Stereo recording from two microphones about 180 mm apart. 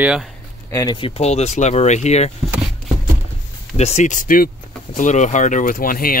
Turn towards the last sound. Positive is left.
turn(degrees=55)  # may be behind; listen again after turning